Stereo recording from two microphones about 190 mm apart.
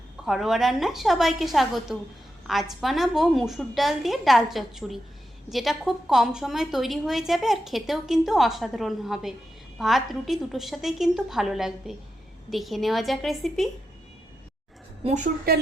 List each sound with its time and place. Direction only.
0.3 s a woman's voice: centre (ahead or behind)
15.0 s a woman's voice: 40° right (ahead or behind)